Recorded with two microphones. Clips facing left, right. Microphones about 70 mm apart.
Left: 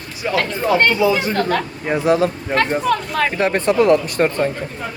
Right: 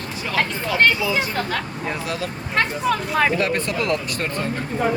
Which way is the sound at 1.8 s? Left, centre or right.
Left.